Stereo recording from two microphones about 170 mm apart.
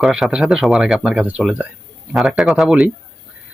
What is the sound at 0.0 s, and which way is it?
Speech, 5° right (ahead or behind).